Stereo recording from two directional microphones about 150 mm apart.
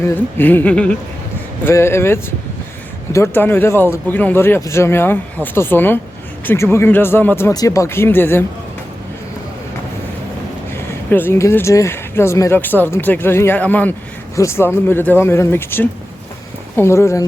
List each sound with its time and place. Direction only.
0.0 s speech: 15° left (ahead or behind)
11.1 s speech: 15° left (ahead or behind)